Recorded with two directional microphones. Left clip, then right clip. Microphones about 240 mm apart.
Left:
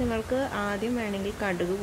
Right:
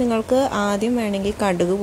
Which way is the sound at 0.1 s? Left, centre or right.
Right.